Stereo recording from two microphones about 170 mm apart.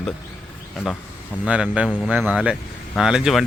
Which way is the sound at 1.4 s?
5° right (ahead or behind).